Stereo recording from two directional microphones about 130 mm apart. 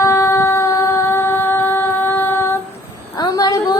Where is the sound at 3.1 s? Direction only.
30° left (ahead or behind).